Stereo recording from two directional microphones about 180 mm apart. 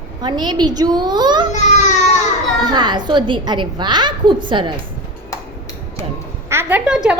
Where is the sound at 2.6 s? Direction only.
25° right (ahead or behind).